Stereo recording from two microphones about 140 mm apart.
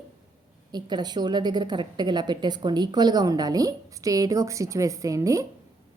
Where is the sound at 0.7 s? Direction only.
30° right (ahead or behind).